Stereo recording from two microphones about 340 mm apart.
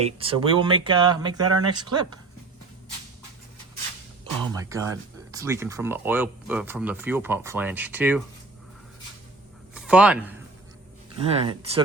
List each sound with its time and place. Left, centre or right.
0.0 s speech: centre
4.2 s speech: centre
9.7 s speech: centre
11.2 s speech: centre